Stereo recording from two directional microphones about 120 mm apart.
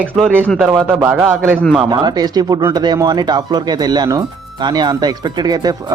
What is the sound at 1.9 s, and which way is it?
A man's voice, 35° right (ahead or behind).